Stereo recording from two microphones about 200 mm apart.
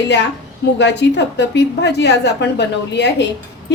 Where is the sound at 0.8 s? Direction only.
60° left (ahead or behind).